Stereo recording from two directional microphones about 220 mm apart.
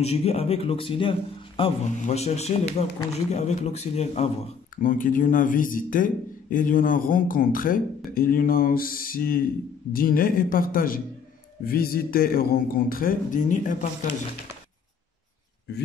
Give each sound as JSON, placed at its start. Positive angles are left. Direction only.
{"t": 0.0, "sound": "speech", "side_deg": 30}
{"t": 15.7, "sound": "a man's voice", "side_deg": 50}